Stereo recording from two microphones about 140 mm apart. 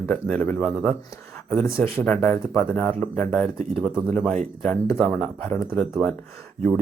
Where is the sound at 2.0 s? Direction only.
10° left (ahead or behind).